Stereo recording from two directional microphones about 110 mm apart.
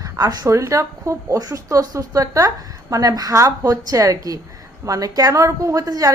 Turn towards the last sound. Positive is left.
turn(degrees=-30)  # may be behind; listen again after turning